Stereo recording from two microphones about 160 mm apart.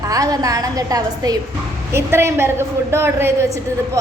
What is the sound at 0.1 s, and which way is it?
A woman's voice, 20° right (ahead or behind).